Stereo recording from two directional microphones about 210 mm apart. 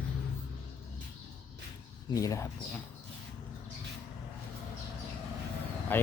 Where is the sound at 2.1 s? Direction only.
15° left (ahead or behind).